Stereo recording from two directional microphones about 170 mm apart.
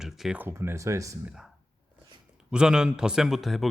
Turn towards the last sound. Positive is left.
turn(degrees=0)  # may be behind; listen again after turning